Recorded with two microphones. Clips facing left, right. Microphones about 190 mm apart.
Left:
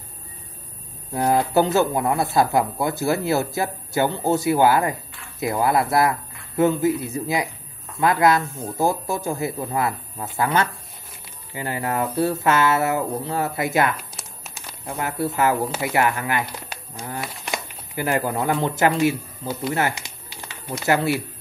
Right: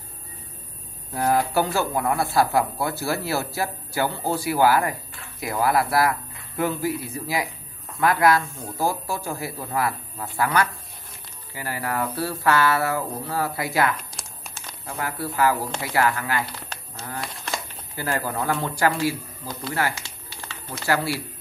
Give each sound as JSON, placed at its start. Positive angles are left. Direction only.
{"t": 1.1, "sound": "speech", "side_deg": 20}